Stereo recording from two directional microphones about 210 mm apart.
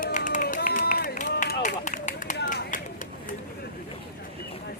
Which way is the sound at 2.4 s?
40° left (ahead or behind).